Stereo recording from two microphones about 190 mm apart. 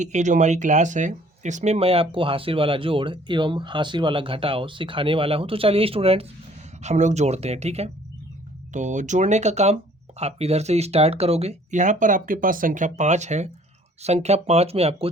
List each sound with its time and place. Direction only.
0.0 s speech: 40° right (ahead or behind)